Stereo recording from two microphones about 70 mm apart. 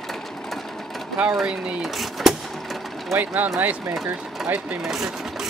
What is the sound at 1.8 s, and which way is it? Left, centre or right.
Speech, centre.